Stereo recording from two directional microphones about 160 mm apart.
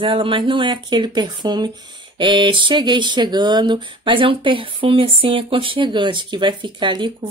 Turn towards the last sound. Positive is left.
turn(degrees=-30)  # may be behind; listen again after turning